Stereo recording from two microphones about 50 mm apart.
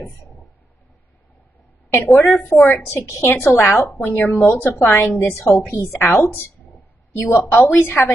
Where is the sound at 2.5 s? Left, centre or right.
Left.